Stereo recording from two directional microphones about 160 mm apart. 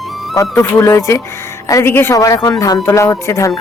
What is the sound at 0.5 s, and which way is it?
A woman's voice, 15° left (ahead or behind).